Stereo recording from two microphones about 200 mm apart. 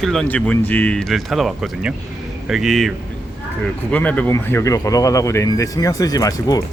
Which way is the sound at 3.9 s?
5° left (ahead or behind).